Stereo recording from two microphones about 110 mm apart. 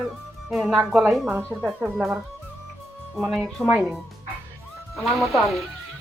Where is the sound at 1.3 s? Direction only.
20° right (ahead or behind).